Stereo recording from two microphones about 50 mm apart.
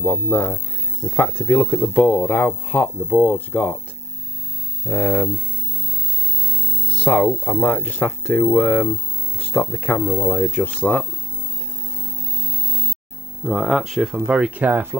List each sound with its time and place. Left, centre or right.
1.1 s speech: left
4.8 s speech: left
6.9 s music: left
7.4 s speech: left
9.5 s speech: left
9.9 s speech: left
13.5 s speech: centre
14.2 s speech: right